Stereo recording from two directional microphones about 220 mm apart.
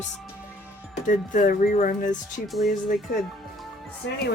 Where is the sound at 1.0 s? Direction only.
35° left (ahead or behind).